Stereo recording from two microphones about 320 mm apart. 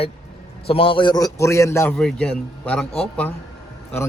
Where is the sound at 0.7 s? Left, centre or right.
Centre.